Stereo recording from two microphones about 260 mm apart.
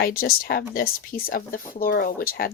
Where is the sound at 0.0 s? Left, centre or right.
Left.